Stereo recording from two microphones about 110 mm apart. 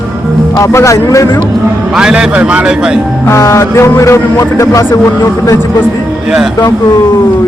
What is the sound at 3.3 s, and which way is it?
Music, 25° left (ahead or behind).